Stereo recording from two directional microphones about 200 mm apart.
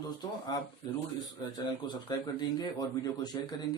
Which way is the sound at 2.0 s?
20° left (ahead or behind).